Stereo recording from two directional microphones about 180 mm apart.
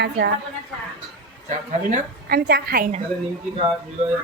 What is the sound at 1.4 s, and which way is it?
Speech, 40° right (ahead or behind).